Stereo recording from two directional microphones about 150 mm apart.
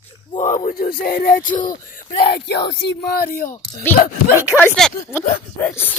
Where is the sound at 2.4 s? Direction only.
90° left; by 3.5 s 75° left (ahead or behind).